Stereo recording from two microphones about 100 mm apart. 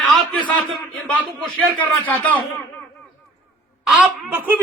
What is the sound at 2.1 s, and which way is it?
Speech, 15° left (ahead or behind).